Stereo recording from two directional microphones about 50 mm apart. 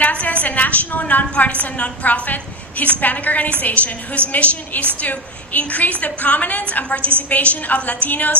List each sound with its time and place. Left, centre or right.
0.0 s a woman's voice: left